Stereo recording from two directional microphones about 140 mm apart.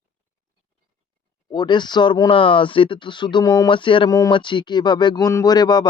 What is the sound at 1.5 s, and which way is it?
Speech, 30° left (ahead or behind).